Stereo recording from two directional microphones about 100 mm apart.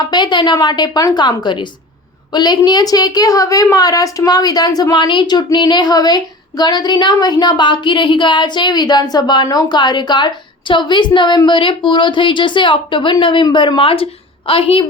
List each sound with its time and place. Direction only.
0.1 s a woman's voice: 50° left (ahead or behind); by 14.8 s 65° left (ahead or behind)